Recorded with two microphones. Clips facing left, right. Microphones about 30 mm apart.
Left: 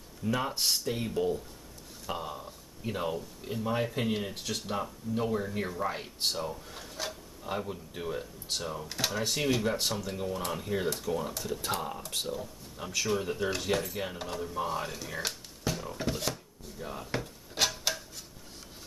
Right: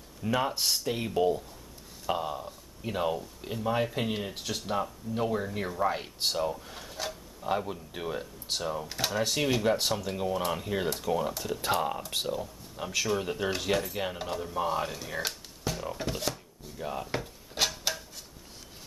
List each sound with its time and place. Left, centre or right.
0.2 s speech: centre
0.6 s speech: centre
0.8 s speech: centre
16.0 s a sound: centre
16.8 s speech: centre
17.1 s a sound: centre